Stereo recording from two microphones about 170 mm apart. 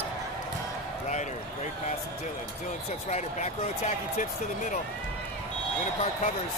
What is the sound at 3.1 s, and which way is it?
Speech, 45° left (ahead or behind).